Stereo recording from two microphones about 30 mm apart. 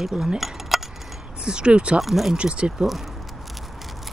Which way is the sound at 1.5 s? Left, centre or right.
Right.